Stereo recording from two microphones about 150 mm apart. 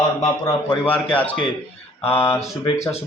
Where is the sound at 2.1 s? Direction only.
20° left (ahead or behind).